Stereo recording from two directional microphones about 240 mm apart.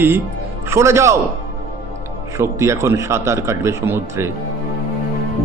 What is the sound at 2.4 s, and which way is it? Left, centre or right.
Speech, centre.